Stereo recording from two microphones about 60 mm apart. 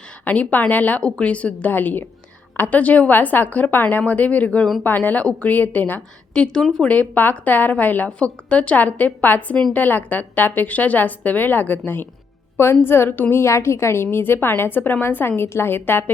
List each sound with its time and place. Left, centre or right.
0.3 s a woman's voice: left
6.3 s speech: centre
6.8 s a woman's voice: left
12.8 s a woman's voice: left